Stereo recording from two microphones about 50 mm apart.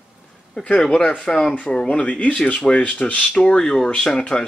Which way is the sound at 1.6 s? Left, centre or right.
Left.